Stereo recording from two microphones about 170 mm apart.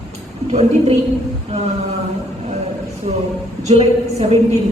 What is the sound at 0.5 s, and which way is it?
Speech, 40° right (ahead or behind).